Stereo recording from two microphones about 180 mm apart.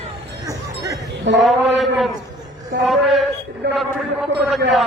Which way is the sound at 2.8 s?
Centre (ahead or behind).